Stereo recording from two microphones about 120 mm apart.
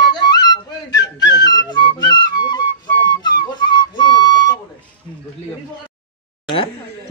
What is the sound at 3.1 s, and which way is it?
Whistle, 35° left (ahead or behind).